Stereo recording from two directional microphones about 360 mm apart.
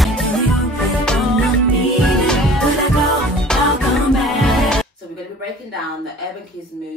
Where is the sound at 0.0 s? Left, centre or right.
Centre.